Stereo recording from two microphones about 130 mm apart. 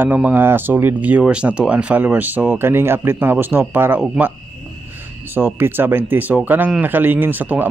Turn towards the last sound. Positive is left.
turn(degrees=-15)  # may be behind; listen again after turning